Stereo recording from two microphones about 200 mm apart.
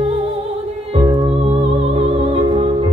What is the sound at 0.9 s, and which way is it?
Music, 30° right (ahead or behind).